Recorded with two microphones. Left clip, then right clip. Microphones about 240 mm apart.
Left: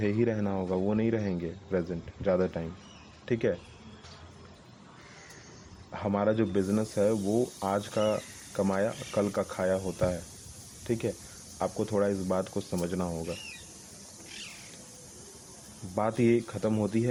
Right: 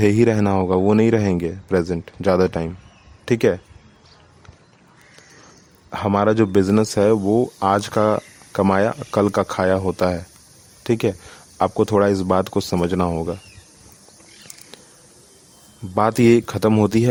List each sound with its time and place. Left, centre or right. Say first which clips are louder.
0.0 s speech: right 13 dB; right
5.9 s speech: right 10 dB; right
16.0 s speech: right 11 dB; right